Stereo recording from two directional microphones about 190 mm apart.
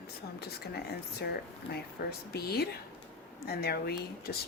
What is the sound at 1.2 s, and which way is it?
Speech, 55° left (ahead or behind).